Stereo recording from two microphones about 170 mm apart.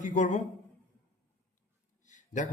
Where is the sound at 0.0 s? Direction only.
45° left (ahead or behind).